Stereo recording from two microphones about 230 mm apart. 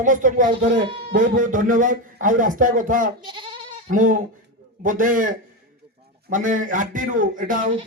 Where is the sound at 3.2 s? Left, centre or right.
Right.